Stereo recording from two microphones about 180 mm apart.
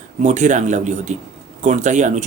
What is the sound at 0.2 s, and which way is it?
Speech, 40° right (ahead or behind).